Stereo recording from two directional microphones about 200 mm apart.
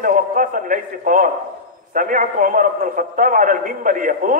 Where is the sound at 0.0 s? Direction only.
40° right (ahead or behind).